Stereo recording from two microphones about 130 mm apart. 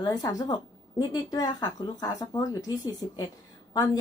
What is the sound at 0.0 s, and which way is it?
A woman's voice, 30° left (ahead or behind).